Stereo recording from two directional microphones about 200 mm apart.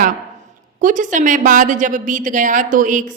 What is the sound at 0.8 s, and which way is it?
A woman's voice, 40° right (ahead or behind).